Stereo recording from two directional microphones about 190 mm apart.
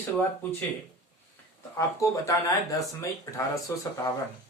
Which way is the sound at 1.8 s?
15° left (ahead or behind).